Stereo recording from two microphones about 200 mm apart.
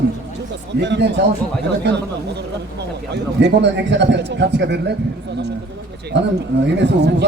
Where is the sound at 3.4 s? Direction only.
60° right (ahead or behind).